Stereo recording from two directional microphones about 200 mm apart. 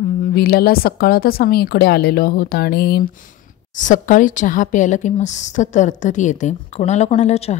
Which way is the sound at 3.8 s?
40° left (ahead or behind).